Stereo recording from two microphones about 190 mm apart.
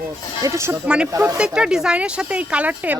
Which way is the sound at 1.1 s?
15° right (ahead or behind).